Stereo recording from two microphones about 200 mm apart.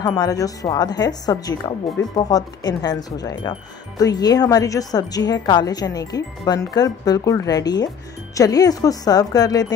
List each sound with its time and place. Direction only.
0.0 s a woman's voice: 20° left (ahead or behind)